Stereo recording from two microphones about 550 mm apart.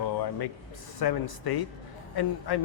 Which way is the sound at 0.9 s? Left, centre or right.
Left.